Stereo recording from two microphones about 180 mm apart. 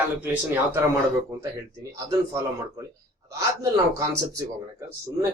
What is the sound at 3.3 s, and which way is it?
Speech, 20° right (ahead or behind).